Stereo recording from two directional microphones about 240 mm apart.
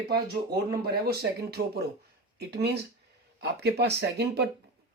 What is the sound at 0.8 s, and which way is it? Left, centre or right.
Speech, right.